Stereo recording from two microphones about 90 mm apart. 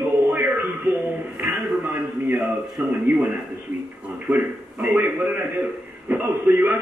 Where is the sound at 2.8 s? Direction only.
15° right (ahead or behind).